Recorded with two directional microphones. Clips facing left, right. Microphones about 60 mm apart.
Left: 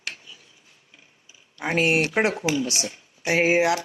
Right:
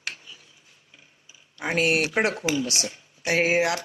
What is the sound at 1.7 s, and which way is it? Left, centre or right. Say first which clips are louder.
Speech: left 1 dB; left.